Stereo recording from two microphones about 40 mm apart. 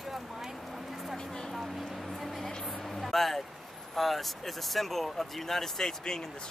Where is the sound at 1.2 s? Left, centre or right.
Centre.